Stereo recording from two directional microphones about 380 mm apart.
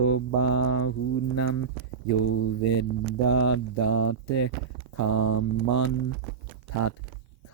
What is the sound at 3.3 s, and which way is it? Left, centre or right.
Mantra, left.